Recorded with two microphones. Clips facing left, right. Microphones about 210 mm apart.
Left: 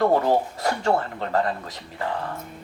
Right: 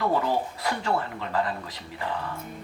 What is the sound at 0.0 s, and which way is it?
Speech, 45° left (ahead or behind).